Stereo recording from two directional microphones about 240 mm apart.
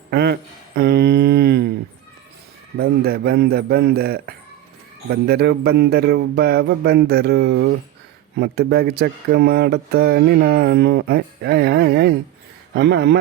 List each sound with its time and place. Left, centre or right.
0.1 s speech: right
0.8 s a sound: right
2.7 s a man's voice: right